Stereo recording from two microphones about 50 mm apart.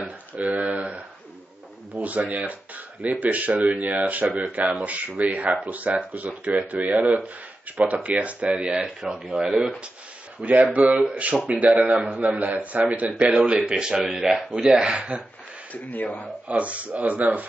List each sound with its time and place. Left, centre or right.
0.0 s a sound: right
2.0 s speech: right
9.0 s speech: centre
10.4 s speech: right
13.4 s speech: centre
14.9 s speech: right
15.7 s speech: left
16.4 s speech: right